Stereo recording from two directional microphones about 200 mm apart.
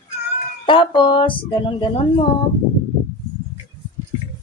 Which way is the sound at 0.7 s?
25° left (ahead or behind).